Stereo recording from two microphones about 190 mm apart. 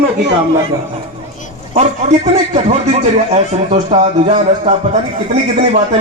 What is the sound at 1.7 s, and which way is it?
Speech, 35° right (ahead or behind).